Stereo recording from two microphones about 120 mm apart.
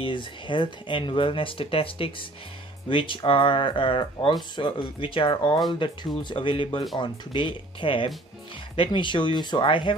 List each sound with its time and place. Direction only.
0.0 s speech: 45° left (ahead or behind)